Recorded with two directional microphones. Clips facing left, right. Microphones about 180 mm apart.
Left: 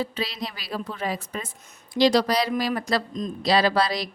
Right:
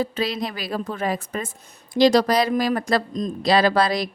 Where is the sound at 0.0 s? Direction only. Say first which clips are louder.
Right 5 dB; 50° right (ahead or behind).